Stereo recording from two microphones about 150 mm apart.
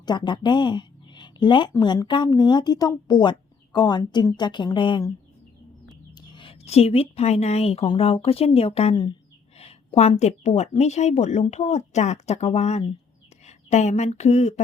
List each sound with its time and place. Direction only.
0.0 s a woman's voice: 30° left (ahead or behind)
6.1 s a woman's voice: 35° left (ahead or behind)